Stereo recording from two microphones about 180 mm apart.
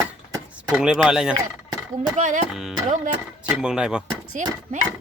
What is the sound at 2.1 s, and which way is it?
Speech, 45° right (ahead or behind).